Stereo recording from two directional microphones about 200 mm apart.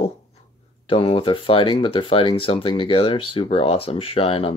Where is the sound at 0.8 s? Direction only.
25° left (ahead or behind).